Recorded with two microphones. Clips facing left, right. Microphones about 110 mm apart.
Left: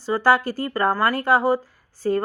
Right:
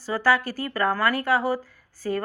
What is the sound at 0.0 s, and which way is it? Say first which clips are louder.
A woman's voice: left 4 dB; 25° left (ahead or behind).